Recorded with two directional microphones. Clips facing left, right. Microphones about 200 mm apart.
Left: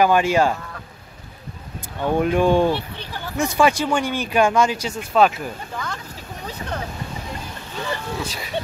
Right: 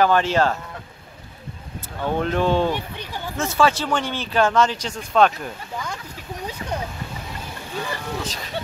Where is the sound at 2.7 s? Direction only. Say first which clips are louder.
Left 2 dB; 10° right (ahead or behind).